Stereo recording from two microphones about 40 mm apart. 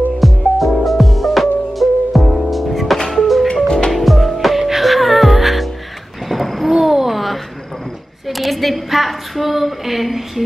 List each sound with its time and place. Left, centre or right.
0.2 s music: centre
3.6 s music: centre
3.9 s music: centre
6.2 s a sound: centre